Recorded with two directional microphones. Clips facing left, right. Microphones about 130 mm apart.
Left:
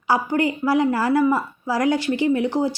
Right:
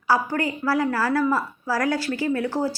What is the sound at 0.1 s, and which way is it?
A woman's voice, 20° left (ahead or behind).